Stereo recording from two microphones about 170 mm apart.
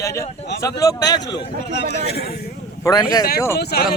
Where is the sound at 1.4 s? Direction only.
75° left (ahead or behind).